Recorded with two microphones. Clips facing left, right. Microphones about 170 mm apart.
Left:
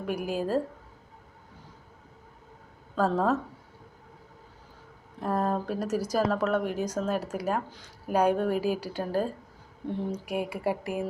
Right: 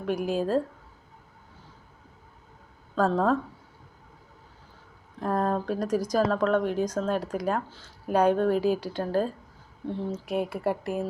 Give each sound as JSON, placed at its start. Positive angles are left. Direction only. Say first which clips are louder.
{"t": 0.0, "sound": "speech", "louder": "right 3 dB", "side_deg": 5}
{"t": 2.9, "sound": "a woman's voice", "louder": "right 2 dB", "side_deg": 5}
{"t": 5.2, "sound": "speech", "louder": "right 1 dB", "side_deg": 5}